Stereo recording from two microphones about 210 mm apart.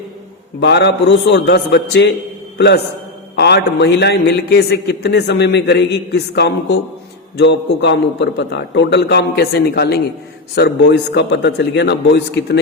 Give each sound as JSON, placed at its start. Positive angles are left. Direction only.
{"t": 0.6, "sound": "a man's voice", "side_deg": 55}